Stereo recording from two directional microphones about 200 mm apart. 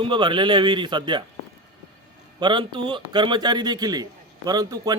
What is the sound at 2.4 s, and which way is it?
Speech, 25° right (ahead or behind).